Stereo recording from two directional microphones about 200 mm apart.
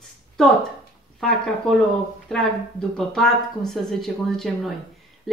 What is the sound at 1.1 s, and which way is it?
Speech, centre (ahead or behind).